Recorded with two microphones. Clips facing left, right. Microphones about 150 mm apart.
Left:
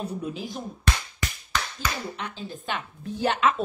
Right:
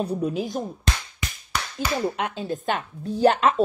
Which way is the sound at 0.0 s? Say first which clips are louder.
Right 7 dB; 35° right (ahead or behind).